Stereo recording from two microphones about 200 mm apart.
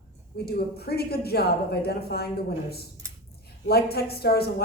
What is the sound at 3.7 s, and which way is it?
Speech, 50° left (ahead or behind).